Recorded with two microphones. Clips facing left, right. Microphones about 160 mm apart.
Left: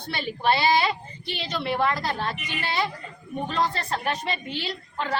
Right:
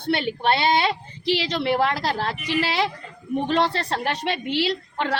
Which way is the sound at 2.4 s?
90° right.